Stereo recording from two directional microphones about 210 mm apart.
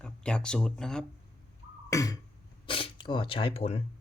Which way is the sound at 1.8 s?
15° left (ahead or behind).